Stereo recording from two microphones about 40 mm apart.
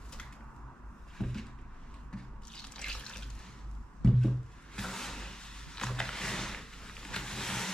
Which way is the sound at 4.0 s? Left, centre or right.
Centre.